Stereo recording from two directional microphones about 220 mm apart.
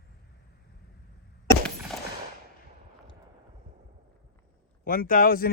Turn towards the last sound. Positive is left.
turn(degrees=40)  # may be behind; listen again after turning